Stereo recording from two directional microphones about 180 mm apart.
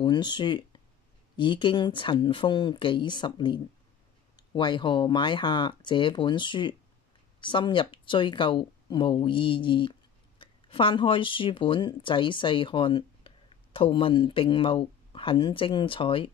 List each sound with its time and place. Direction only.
0.0 s speech: 25° left (ahead or behind)